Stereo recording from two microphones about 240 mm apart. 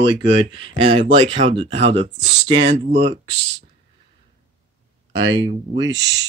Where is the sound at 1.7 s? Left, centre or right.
Right.